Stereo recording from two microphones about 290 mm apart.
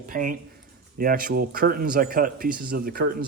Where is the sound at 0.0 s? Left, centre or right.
Right.